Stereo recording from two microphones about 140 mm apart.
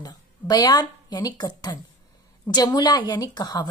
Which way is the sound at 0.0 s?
30° left (ahead or behind).